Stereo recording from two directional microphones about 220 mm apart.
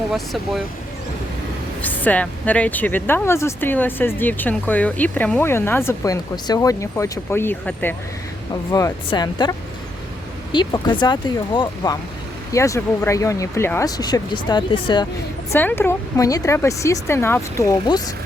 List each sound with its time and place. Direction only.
1.8 s speech: 5° left (ahead or behind)
8.7 s speech: 20° left (ahead or behind)
15.5 s speech: 10° left (ahead or behind)